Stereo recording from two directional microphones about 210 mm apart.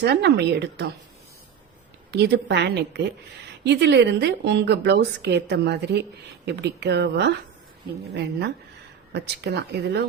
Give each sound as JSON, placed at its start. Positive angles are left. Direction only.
{"t": 0.0, "sound": "a woman's voice", "side_deg": -55}
{"t": 2.0, "sound": "a woman's voice", "side_deg": -50}